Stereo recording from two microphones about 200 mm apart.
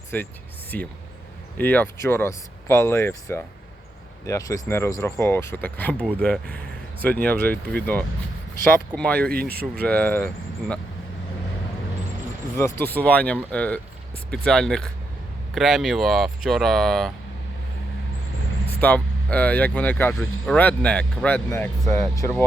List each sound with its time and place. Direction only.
0.1 s speech: 10° left (ahead or behind)
9.3 s speech: 50° right (ahead or behind)
9.8 s speech: 5° left (ahead or behind)
12.5 s speech: 15° left (ahead or behind)
18.8 s speech: 10° left (ahead or behind)